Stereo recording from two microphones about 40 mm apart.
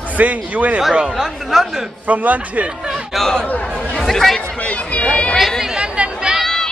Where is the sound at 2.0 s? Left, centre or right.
Right.